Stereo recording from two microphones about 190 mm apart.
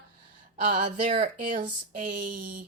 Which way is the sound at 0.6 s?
45° right (ahead or behind).